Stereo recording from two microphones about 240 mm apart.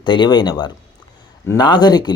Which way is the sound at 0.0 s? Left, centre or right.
Centre.